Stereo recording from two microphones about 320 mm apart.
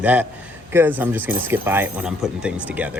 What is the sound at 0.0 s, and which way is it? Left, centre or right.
Speech, centre.